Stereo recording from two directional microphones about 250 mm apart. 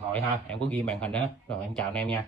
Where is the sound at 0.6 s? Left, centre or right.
Centre.